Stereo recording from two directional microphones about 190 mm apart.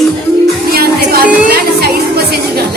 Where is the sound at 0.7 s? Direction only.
55° right (ahead or behind).